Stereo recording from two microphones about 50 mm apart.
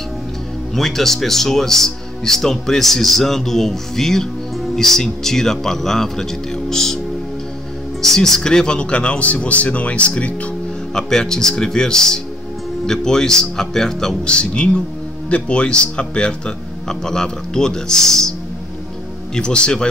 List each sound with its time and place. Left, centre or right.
0.7 s speech: centre
8.0 s speech: centre; by 10.5 s left
11.0 s speech: centre
14.2 s speech: centre
19.3 s speech: centre